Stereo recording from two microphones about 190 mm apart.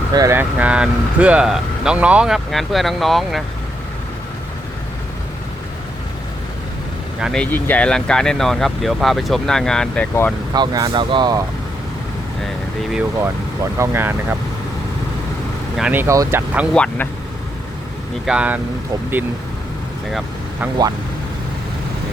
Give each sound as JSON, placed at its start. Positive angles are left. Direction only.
{"t": 0.1, "sound": "speech", "side_deg": -15}
{"t": 7.2, "sound": "speech", "side_deg": 0}
{"t": 10.5, "sound": "speech", "side_deg": -20}
{"t": 12.9, "sound": "speech", "side_deg": -10}
{"t": 15.8, "sound": "speech", "side_deg": -10}
{"t": 16.7, "sound": "speech", "side_deg": 5}
{"t": 18.3, "sound": "speech", "side_deg": -5}
{"t": 20.1, "sound": "vehicle", "side_deg": 0}